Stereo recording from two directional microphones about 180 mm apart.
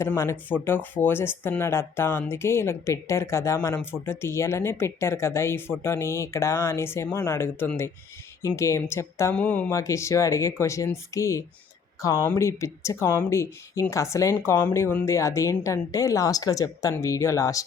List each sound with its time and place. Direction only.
0.0 s speech: 15° left (ahead or behind)